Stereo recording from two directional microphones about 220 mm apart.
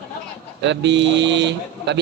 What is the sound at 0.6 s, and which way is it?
A man's voice, 55° right (ahead or behind).